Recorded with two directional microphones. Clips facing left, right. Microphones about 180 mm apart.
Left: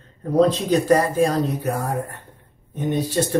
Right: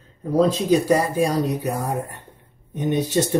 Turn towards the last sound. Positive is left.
turn(degrees=-20)  # may be behind; listen again after turning